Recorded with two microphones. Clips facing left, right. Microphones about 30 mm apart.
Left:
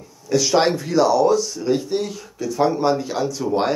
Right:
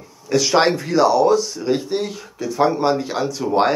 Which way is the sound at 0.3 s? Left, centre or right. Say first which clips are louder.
Right 1 dB; right.